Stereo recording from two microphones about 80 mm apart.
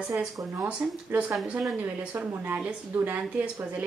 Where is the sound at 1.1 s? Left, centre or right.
Right.